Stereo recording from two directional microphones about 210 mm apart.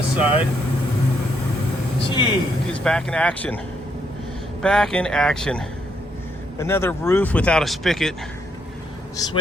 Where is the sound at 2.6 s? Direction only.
5° left (ahead or behind).